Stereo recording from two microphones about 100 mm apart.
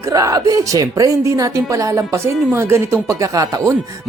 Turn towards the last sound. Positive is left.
turn(degrees=-35)  # may be behind; listen again after turning